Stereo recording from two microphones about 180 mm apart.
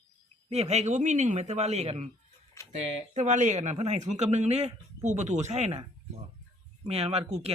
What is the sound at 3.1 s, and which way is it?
Speech, 40° right (ahead or behind).